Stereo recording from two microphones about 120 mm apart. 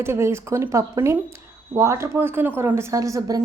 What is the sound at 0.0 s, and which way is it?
A woman's voice, 20° right (ahead or behind).